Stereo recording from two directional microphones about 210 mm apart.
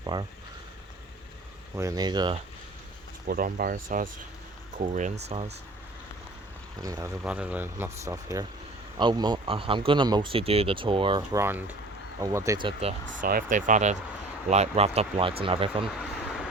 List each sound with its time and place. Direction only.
0.0 s speech: 20° right (ahead or behind)
1.7 s speech: 15° right (ahead or behind)
3.2 s speech: 45° right (ahead or behind)
6.8 s speech: 15° right (ahead or behind)
13.2 s speech: 40° right (ahead or behind); by 15.9 s 25° right (ahead or behind)